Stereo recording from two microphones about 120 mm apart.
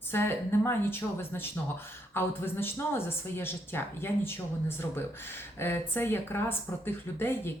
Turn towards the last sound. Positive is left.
turn(degrees=20)  # may be behind; listen again after turning